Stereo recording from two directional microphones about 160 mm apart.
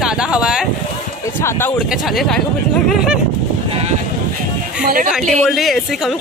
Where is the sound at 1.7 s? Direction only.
Centre (ahead or behind).